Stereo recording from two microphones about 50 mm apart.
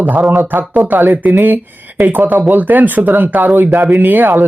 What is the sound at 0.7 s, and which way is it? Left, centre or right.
Speech, right.